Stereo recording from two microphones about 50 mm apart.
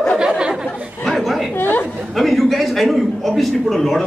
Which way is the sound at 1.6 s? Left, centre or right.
Left.